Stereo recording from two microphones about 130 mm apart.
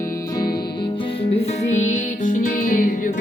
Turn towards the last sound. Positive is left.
turn(degrees=90)